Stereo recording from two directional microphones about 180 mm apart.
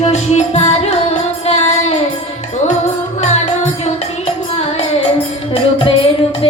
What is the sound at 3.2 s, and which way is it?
Music, 40° left (ahead or behind).